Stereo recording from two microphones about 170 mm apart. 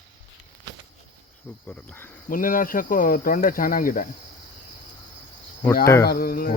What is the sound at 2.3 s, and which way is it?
Speech, 55° left (ahead or behind).